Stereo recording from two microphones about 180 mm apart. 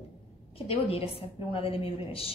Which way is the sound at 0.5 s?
30° left (ahead or behind).